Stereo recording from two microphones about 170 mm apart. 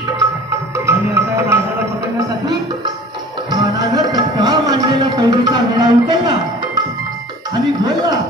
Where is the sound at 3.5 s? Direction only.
20° right (ahead or behind).